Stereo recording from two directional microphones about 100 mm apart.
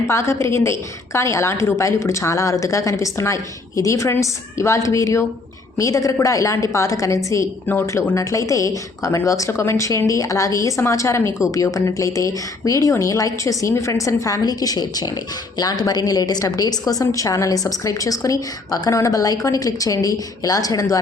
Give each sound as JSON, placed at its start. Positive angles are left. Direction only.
{"t": 0.1, "sound": "a woman's voice", "side_deg": 30}